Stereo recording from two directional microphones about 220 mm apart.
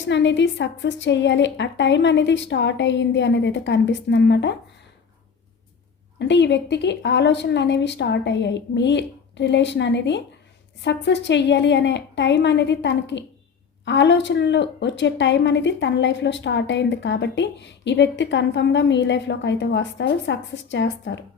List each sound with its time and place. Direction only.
0.0 s a woman's voice: 55° left (ahead or behind)
6.1 s a woman's voice: 55° left (ahead or behind)